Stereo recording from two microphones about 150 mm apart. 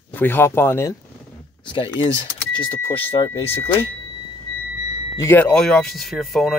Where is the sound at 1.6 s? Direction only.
30° left (ahead or behind).